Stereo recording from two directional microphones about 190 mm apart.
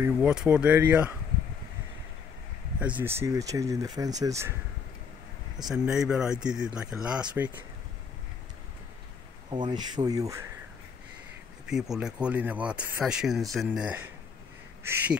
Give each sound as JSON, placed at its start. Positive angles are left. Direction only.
{"t": 0.0, "sound": "speech", "side_deg": -5}
{"t": 2.8, "sound": "speech", "side_deg": -10}
{"t": 5.7, "sound": "speech", "side_deg": -5}
{"t": 9.5, "sound": "speech", "side_deg": -25}
{"t": 11.6, "sound": "speech", "side_deg": -5}